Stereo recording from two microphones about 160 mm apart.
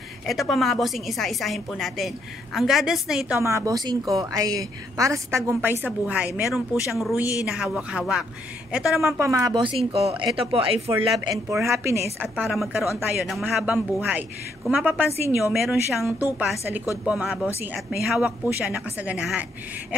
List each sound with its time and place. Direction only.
0.3 s a woman's voice: centre (ahead or behind)
3.3 s a woman's voice: 15° right (ahead or behind)
9.2 s a woman's voice: 20° right (ahead or behind)
9.6 s speech: 35° right (ahead or behind)
11.1 s a woman's voice: 20° right (ahead or behind)